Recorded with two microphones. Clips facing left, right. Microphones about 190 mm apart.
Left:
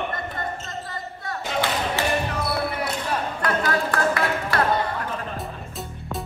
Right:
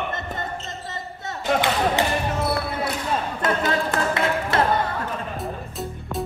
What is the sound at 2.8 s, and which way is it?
Music, 25° right (ahead or behind).